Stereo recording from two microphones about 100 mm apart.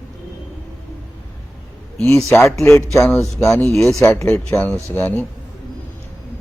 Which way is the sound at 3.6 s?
25° left (ahead or behind).